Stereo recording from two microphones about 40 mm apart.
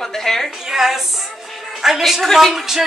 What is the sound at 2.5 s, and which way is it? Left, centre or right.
Music, centre.